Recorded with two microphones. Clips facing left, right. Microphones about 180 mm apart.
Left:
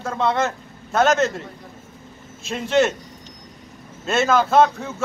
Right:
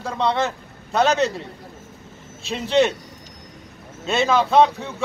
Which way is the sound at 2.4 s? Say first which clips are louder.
Even; centre (ahead or behind).